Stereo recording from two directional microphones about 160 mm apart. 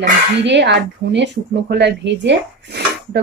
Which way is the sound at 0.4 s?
90° right.